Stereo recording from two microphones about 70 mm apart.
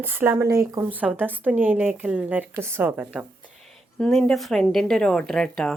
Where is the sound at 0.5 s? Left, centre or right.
Right.